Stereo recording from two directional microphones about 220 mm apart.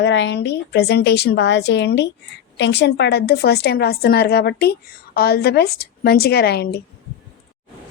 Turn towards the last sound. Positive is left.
turn(degrees=45)  # may be behind; listen again after turning